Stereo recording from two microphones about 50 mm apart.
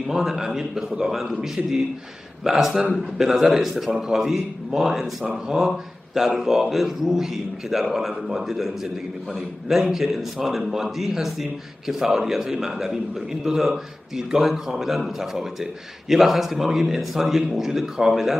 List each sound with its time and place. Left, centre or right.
0.1 s a man's voice: centre